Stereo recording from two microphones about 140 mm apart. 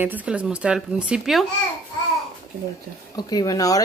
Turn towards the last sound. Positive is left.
turn(degrees=25)  # may be behind; listen again after turning